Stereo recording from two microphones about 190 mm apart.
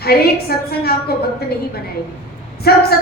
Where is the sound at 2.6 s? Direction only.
55° left (ahead or behind).